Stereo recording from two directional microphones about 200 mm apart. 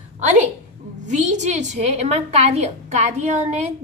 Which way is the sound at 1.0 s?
35° right (ahead or behind).